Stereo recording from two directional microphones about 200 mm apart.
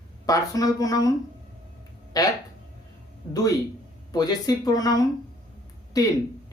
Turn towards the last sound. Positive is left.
turn(degrees=20)  # may be behind; listen again after turning